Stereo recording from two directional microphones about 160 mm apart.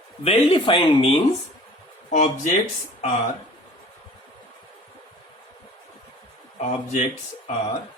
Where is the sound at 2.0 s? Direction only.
50° left (ahead or behind).